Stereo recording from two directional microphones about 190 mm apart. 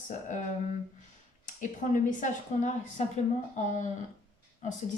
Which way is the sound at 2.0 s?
40° left (ahead or behind).